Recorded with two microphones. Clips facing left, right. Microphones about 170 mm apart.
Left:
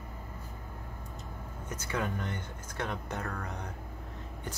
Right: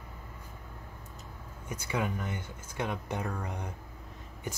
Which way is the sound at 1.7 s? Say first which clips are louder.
Right 1 dB; 10° right (ahead or behind).